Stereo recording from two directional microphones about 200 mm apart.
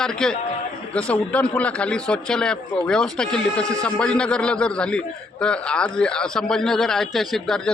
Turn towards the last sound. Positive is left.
turn(degrees=0)  # may be behind; listen again after turning